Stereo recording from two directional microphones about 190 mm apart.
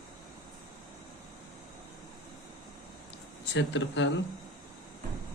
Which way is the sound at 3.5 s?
70° left (ahead or behind).